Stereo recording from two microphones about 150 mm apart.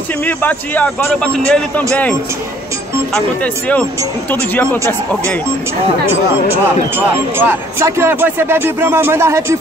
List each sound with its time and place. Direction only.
0.4 s a man's voice: 10° left (ahead or behind)
7.1 s speech: 15° right (ahead or behind)